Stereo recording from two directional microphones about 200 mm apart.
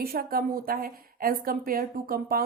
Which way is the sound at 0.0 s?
50° right (ahead or behind).